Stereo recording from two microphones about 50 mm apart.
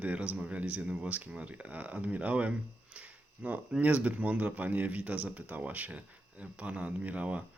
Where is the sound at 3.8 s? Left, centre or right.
Right.